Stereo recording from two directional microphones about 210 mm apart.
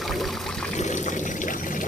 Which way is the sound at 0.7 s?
35° left (ahead or behind).